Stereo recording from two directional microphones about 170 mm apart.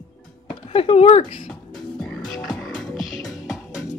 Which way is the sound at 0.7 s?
35° left (ahead or behind).